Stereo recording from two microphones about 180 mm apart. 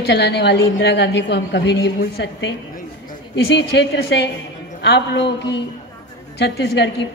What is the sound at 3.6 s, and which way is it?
A woman's voice, 70° left (ahead or behind).